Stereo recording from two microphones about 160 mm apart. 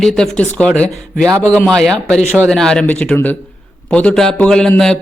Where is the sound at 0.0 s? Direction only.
5° left (ahead or behind).